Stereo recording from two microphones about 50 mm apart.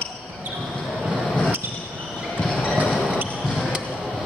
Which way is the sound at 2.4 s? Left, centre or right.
Centre.